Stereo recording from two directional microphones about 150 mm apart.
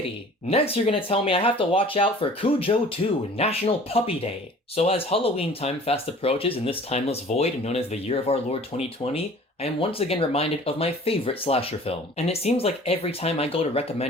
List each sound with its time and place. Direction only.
0.5 s speech: 40° left (ahead or behind)